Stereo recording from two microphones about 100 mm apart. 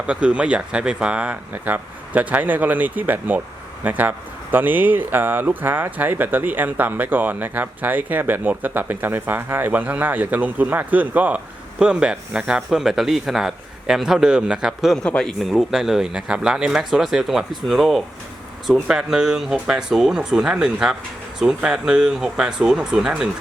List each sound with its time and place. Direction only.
0.1 s speech: 10° right (ahead or behind)
15.0 s speech: 10° left (ahead or behind)
15.4 s speech: centre (ahead or behind)